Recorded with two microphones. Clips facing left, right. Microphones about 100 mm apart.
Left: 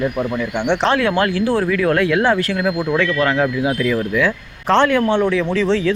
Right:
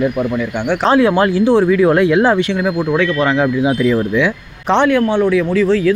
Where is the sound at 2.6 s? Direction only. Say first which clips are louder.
Right 3 dB; 15° right (ahead or behind).